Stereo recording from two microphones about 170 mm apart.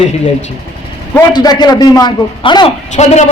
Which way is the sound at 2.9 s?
45° left (ahead or behind).